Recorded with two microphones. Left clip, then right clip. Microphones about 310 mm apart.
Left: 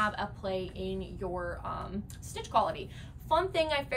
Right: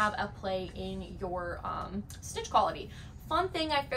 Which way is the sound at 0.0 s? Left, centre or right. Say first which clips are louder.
Right 1 dB; centre.